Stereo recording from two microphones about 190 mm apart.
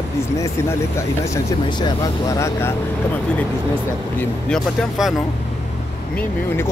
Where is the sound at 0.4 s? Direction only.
15° left (ahead or behind).